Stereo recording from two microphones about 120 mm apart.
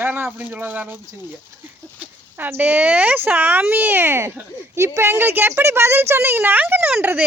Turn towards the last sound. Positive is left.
turn(degrees=-15)  # may be behind; listen again after turning